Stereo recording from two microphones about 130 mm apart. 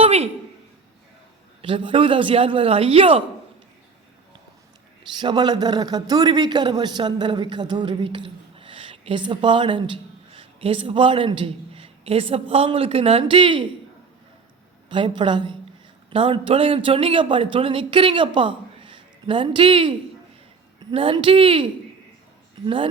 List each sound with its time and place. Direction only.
0.0 s a sound: 55° right (ahead or behind)
1.6 s a man's voice: 40° right (ahead or behind)
5.2 s a man's voice: 35° right (ahead or behind)
14.8 s a man's voice: 40° right (ahead or behind)
20.9 s a man's voice: 45° right (ahead or behind)